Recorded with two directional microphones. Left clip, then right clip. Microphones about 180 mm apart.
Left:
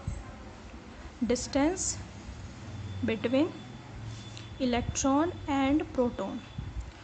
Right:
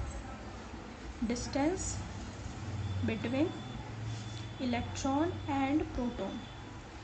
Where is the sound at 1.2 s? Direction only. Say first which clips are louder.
Left 5 dB; 40° left (ahead or behind).